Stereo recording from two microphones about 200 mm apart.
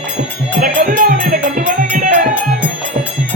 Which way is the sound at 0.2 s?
40° right (ahead or behind).